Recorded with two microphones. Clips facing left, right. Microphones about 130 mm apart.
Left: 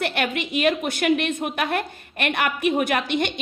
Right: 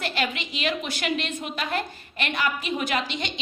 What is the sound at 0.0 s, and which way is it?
A woman's voice, 60° left (ahead or behind).